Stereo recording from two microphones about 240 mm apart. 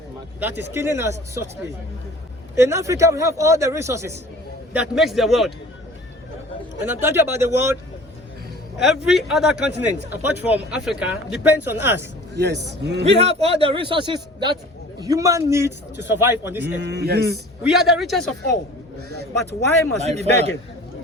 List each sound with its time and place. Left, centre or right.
0.3 s speech: centre
2.6 s speech: centre
6.8 s speech: centre
8.8 s speech: centre
12.3 s speech: right
13.1 s a man's voice: right; by 16.6 s centre
16.6 s speech: right
17.6 s speech: centre
20.0 s a man's voice: right